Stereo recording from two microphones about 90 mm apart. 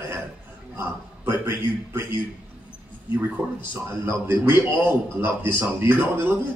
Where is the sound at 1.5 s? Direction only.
30° right (ahead or behind).